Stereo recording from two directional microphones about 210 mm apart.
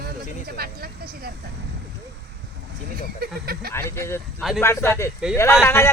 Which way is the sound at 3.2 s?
45° right (ahead or behind).